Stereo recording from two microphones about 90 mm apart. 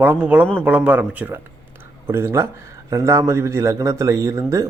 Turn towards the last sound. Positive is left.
turn(degrees=-35)  # may be behind; listen again after turning